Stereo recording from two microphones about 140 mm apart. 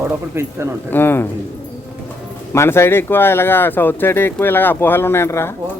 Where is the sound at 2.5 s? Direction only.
20° left (ahead or behind).